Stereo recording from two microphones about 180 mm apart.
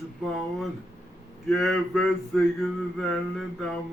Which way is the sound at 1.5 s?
Centre (ahead or behind).